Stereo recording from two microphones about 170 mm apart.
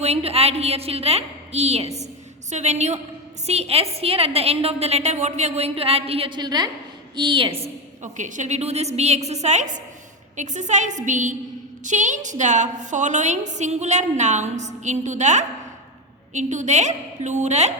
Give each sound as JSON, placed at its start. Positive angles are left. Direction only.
{"t": 0.0, "sound": "a woman's voice", "side_deg": -35}